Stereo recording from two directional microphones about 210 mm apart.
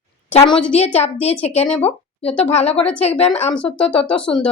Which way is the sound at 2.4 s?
30° left (ahead or behind).